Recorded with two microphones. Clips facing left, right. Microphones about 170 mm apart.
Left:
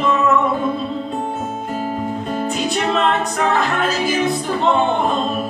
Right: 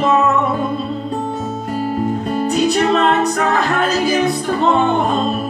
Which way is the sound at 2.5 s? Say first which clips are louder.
Right 7 dB; 40° right (ahead or behind).